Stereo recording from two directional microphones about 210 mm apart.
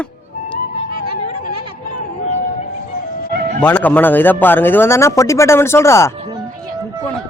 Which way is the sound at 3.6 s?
10° left (ahead or behind).